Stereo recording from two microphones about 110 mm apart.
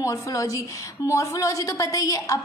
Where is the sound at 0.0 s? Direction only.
30° left (ahead or behind).